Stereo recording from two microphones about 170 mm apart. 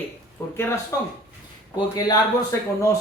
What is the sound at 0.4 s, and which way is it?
Speech, 10° left (ahead or behind).